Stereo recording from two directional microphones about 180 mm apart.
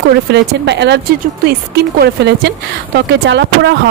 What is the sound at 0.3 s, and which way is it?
A woman's voice, 70° right (ahead or behind).